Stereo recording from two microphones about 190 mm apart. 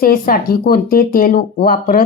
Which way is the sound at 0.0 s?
50° left (ahead or behind).